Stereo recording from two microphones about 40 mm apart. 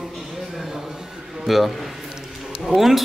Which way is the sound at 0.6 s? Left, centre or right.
Centre.